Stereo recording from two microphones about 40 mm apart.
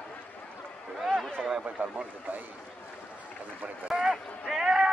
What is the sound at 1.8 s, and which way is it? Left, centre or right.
Speech, right.